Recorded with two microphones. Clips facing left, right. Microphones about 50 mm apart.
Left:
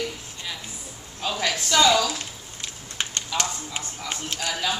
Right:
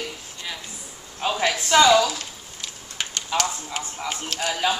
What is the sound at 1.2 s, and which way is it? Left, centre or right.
Speech, right.